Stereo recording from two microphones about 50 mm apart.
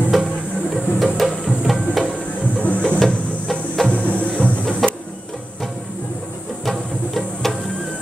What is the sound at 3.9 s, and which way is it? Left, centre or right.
Music, left.